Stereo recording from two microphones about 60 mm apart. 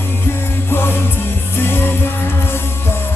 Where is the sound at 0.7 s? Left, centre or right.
Left.